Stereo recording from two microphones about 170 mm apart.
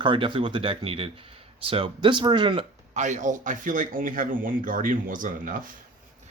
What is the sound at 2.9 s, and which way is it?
Speech, 45° right (ahead or behind).